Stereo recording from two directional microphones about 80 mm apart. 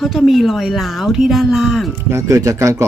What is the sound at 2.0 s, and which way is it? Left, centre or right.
Speech, right.